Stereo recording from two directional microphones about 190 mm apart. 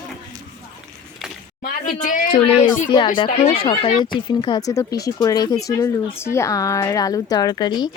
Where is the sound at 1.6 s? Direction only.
45° left (ahead or behind).